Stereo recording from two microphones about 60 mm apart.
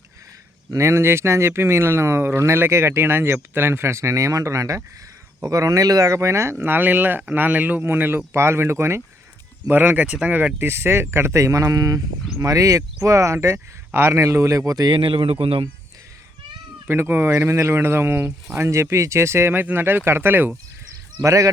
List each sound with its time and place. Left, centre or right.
0.8 s speech: right
6.1 s speech: right
8.3 s speech: right
9.6 s speech: right
10.1 s speech: centre
10.3 s speech: right
10.7 s speech: right
11.3 s speech: right
12.4 s speech: right
16.8 s speech: right
18.7 s speech: right
19.5 s speech: right
21.2 s speech: right